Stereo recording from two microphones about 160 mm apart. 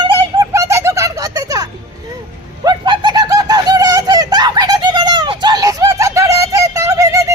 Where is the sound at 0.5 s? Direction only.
20° right (ahead or behind).